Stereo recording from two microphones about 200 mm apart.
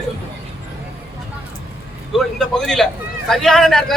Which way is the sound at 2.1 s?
Centre (ahead or behind).